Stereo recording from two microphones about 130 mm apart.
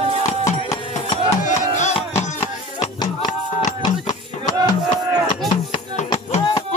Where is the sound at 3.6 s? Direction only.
30° left (ahead or behind).